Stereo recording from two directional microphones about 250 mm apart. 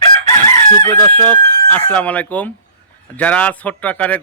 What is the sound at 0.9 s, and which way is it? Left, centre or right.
Speech, centre.